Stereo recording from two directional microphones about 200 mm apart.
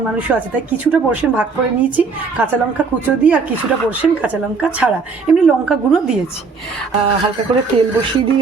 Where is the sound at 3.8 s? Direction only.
5° right (ahead or behind).